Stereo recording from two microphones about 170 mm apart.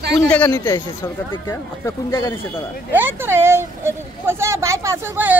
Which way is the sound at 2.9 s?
15° right (ahead or behind).